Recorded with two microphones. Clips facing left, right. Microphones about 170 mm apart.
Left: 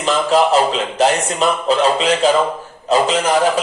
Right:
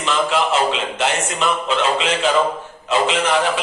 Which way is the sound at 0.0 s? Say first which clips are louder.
Left 5 dB; 40° left (ahead or behind).